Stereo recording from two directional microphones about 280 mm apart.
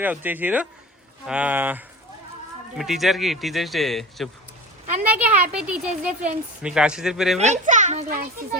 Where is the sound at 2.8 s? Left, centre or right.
Centre.